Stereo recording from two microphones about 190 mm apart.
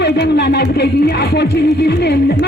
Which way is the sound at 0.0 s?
60° left (ahead or behind).